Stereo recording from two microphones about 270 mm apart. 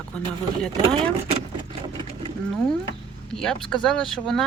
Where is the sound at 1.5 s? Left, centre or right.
Centre.